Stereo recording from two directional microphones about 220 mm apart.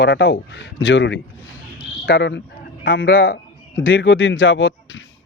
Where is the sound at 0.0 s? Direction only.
55° left (ahead or behind).